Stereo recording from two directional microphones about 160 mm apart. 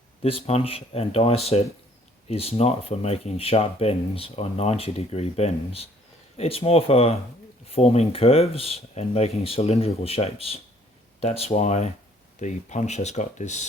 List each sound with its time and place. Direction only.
0.2 s speech: 35° left (ahead or behind)